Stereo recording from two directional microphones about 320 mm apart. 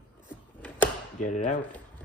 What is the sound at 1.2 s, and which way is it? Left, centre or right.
Speech, left.